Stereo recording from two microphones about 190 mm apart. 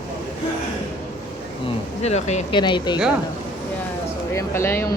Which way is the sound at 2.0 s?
35° left (ahead or behind).